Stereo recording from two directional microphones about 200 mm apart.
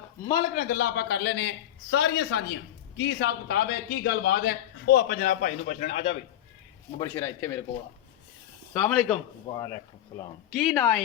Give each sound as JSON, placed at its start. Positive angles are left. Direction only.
{"t": 0.5, "sound": "a man's voice", "side_deg": 45}
{"t": 7.0, "sound": "a man's voice", "side_deg": 20}
{"t": 8.7, "sound": "a man's voice", "side_deg": 5}
{"t": 9.5, "sound": "speech", "side_deg": 20}
{"t": 10.5, "sound": "speech", "side_deg": 0}